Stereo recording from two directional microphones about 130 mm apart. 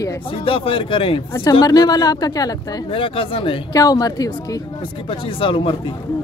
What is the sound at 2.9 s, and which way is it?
Speech, 45° left (ahead or behind).